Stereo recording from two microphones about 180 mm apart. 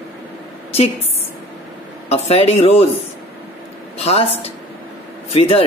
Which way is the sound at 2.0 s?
35° left (ahead or behind).